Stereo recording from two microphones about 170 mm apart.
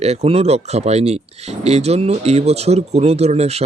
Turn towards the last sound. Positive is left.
turn(degrees=-40)  # may be behind; listen again after turning